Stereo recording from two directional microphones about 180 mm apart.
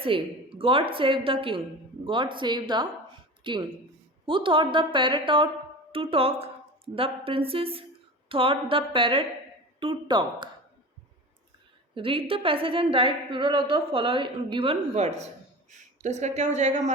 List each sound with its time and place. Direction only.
0.0 s a woman's voice: 30° right (ahead or behind)
11.9 s a woman's voice: 30° right (ahead or behind)